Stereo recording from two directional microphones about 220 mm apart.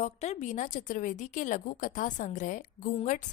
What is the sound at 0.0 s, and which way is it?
A woman's voice, 30° left (ahead or behind).